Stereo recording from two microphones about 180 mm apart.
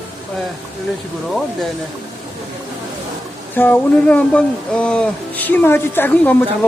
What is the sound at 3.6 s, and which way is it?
Speech, 10° left (ahead or behind).